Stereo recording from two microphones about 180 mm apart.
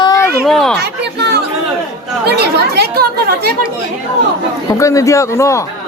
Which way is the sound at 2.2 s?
65° right (ahead or behind).